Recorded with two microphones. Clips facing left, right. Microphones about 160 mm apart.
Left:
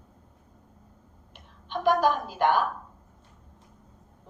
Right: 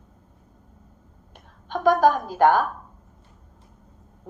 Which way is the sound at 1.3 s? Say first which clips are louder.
Right 4 dB; 45° right (ahead or behind).